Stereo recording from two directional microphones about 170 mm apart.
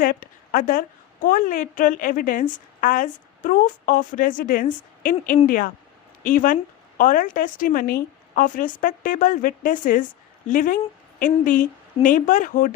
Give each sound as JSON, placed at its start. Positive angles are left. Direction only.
{"t": 0.0, "sound": "a woman's voice", "side_deg": 55}